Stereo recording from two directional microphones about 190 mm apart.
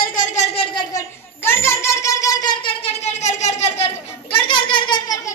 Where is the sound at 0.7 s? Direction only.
15° left (ahead or behind).